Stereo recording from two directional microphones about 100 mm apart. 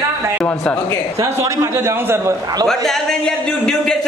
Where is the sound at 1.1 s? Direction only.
30° right (ahead or behind).